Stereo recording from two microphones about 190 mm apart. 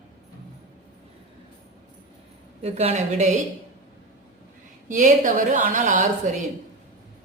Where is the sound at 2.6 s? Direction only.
35° right (ahead or behind).